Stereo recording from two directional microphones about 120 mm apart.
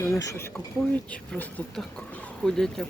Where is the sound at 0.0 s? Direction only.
25° left (ahead or behind).